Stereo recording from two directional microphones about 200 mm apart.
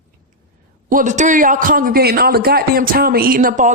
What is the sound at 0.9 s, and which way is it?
A man's voice, 40° right (ahead or behind).